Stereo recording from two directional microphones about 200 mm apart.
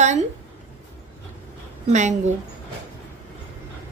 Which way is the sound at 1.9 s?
35° right (ahead or behind).